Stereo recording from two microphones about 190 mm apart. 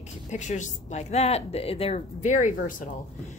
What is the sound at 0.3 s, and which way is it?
A woman's voice, 40° left (ahead or behind).